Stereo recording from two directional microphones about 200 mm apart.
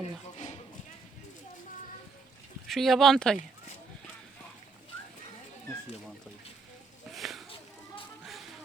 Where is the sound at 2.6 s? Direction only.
Centre (ahead or behind).